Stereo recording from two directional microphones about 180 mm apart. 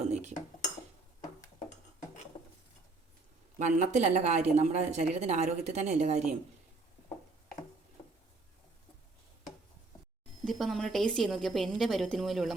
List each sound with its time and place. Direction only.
0.1 s dishes: 40° right (ahead or behind)
2.3 s dishes: 30° left (ahead or behind)
3.6 s speech: 40° right (ahead or behind)
10.4 s a woman's voice: centre (ahead or behind)